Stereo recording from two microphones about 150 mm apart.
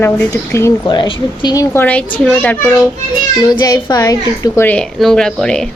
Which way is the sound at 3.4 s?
25° left (ahead or behind).